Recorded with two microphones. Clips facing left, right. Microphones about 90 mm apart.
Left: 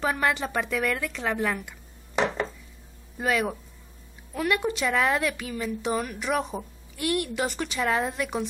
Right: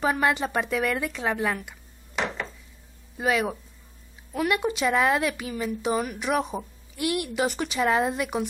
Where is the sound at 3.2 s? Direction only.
5° right (ahead or behind).